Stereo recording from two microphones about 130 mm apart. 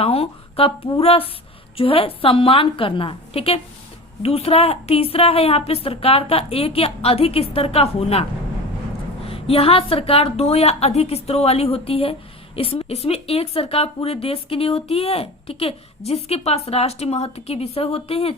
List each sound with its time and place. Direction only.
0.0 s speech: 50° left (ahead or behind)